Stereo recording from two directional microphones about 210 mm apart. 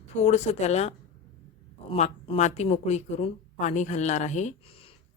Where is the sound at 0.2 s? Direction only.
30° left (ahead or behind).